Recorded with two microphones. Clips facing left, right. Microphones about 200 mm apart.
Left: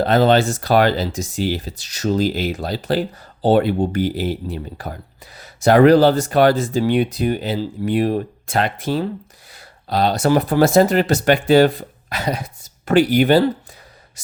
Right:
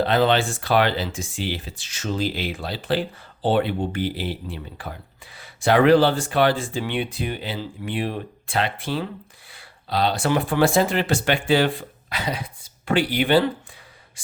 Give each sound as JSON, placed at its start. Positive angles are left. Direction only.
{"t": 0.0, "sound": "speech", "side_deg": 40}